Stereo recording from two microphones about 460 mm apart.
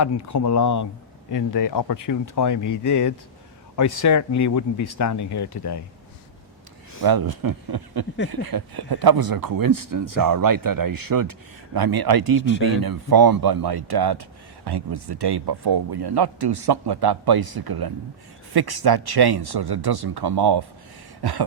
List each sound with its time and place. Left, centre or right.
0.0 s speech: left
7.0 s speech: right
21.2 s a sound: right